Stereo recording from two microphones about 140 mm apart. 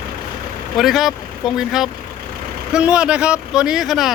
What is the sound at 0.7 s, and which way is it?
Speech, centre (ahead or behind).